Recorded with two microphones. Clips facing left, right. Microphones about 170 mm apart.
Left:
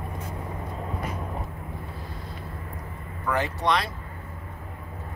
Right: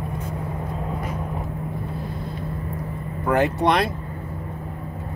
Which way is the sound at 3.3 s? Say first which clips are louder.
Right 6 dB; 55° right (ahead or behind).